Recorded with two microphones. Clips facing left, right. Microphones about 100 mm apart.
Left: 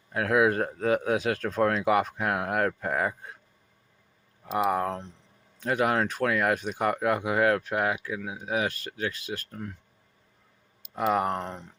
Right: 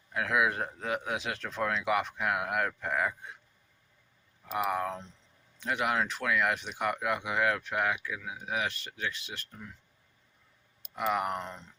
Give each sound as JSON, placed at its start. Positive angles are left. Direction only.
{"t": 0.1, "sound": "speech", "side_deg": 35}
{"t": 4.5, "sound": "speech", "side_deg": 35}
{"t": 4.9, "sound": "speech", "side_deg": 60}
{"t": 5.5, "sound": "speech", "side_deg": 40}
{"t": 10.9, "sound": "speech", "side_deg": 35}
{"t": 11.4, "sound": "speech", "side_deg": 60}